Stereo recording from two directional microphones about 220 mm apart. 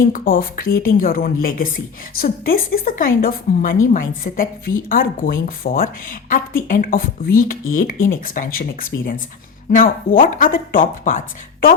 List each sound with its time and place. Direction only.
0.1 s speech: 40° left (ahead or behind)